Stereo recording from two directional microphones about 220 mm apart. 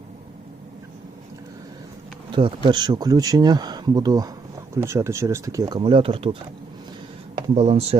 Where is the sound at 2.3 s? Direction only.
20° right (ahead or behind).